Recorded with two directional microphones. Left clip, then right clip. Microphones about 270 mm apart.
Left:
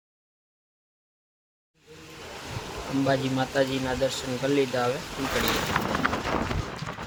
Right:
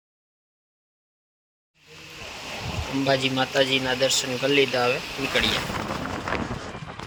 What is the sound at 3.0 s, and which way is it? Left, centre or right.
Speech, right.